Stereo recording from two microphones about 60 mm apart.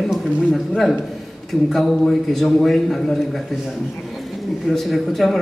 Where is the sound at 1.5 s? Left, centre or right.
Centre.